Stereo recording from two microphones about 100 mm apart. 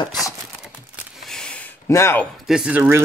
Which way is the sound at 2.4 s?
5° right (ahead or behind).